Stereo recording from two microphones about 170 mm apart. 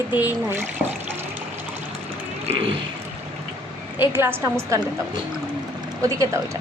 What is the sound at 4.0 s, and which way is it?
Speech, 15° right (ahead or behind).